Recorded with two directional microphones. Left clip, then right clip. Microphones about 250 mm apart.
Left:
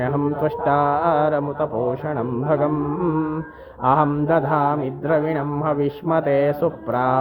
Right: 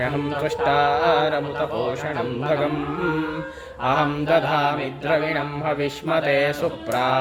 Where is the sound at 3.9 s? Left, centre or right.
Left.